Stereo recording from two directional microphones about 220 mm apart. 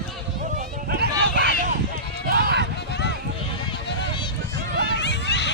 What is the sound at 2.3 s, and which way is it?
Run, 45° right (ahead or behind).